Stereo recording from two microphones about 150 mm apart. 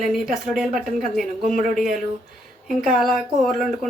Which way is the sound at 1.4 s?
60° right (ahead or behind).